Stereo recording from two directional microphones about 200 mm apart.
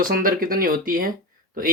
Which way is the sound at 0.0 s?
45° right (ahead or behind).